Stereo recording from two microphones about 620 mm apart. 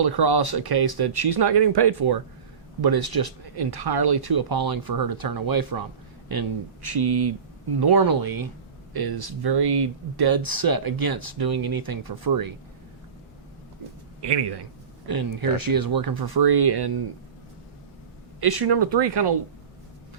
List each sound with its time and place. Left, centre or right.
0.0 s speech: right
14.2 s speech: right
18.3 s speech: right